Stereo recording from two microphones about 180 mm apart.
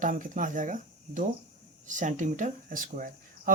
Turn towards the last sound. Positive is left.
turn(degrees=-50)  # may be behind; listen again after turning